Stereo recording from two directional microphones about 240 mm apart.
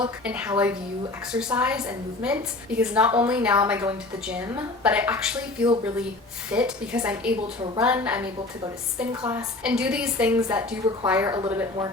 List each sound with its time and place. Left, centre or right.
0.3 s a woman's voice: centre
11.3 s speech: centre